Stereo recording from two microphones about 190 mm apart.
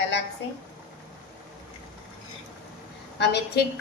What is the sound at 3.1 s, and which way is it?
Speech, 65° left (ahead or behind).